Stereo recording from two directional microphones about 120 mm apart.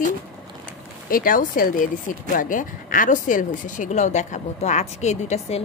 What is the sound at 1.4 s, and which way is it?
Speech, 90° left.